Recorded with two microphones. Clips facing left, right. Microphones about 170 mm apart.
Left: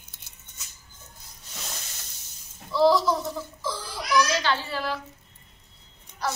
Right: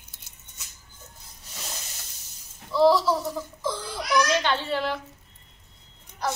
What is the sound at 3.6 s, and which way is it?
Crying, 20° right (ahead or behind).